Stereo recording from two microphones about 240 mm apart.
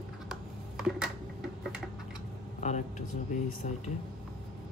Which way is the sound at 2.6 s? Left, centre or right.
Left.